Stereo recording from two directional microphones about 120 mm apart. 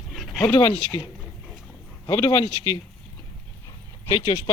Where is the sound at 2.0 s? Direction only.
35° left (ahead or behind).